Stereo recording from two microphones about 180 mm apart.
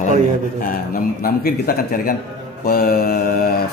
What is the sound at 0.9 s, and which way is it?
Speech, 55° left (ahead or behind).